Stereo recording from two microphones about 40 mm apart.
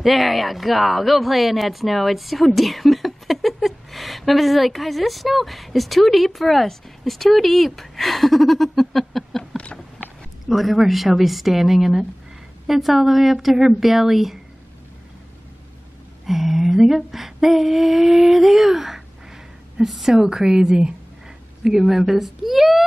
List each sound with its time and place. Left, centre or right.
0.0 s speech: centre
9.6 s a sound: left
10.4 s speech: centre
16.3 s a woman's voice: centre
21.6 s speech: centre